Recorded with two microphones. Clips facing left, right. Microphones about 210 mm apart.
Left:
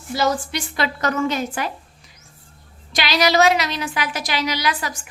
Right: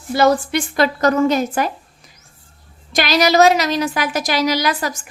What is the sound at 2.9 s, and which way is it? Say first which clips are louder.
A woman's voice: right 4 dB; 45° right (ahead or behind).